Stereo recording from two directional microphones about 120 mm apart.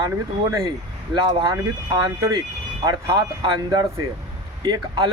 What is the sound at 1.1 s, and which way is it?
Speech, 40° right (ahead or behind).